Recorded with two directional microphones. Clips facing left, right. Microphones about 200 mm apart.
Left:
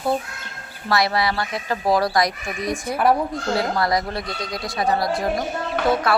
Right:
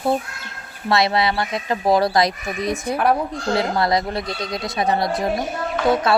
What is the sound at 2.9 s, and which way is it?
Speech, 5° left (ahead or behind).